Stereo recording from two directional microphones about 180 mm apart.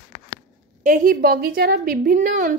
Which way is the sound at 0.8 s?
50° right (ahead or behind).